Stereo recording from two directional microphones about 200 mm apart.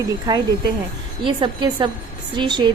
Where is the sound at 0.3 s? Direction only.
20° right (ahead or behind).